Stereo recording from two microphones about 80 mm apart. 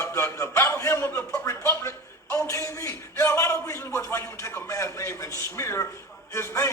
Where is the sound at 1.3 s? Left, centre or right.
Left.